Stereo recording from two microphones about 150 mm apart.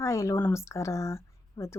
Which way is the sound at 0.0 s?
20° left (ahead or behind).